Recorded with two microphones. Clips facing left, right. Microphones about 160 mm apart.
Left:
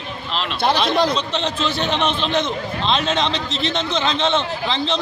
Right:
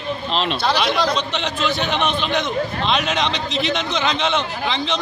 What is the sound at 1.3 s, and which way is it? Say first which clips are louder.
A man's voice: even; 30° left (ahead or behind).